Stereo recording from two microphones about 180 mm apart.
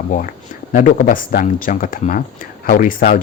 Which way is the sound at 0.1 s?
45° left (ahead or behind).